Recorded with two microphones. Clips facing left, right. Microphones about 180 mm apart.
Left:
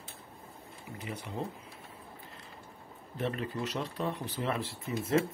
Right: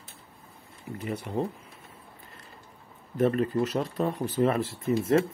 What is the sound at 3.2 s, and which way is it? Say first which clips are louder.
Speech: right 10 dB; 45° right (ahead or behind).